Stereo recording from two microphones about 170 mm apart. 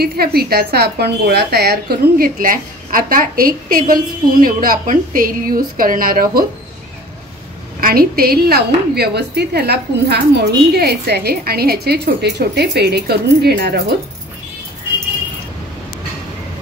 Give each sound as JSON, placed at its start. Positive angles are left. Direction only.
{"t": 0.0, "sound": "a woman's voice", "side_deg": -65}
{"t": 7.8, "sound": "a woman's voice", "side_deg": -60}